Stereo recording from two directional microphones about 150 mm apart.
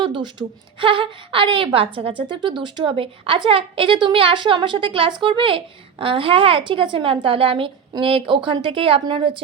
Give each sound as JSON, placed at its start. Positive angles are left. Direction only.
{"t": 0.0, "sound": "a woman's voice", "side_deg": -30}